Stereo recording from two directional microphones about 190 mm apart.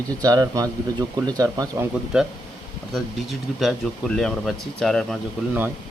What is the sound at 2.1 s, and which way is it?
Speech, 5° right (ahead or behind).